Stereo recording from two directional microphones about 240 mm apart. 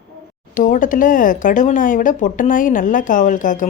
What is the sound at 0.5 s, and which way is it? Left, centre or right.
Speech, left.